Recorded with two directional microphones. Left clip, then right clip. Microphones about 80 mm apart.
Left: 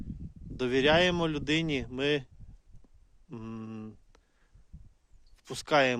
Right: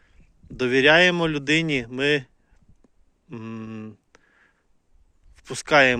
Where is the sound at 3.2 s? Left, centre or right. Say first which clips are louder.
Right 6 dB; left.